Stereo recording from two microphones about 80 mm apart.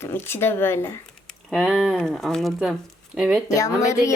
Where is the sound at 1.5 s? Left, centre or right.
Centre.